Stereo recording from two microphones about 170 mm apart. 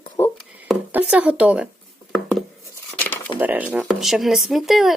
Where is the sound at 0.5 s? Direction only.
10° right (ahead or behind).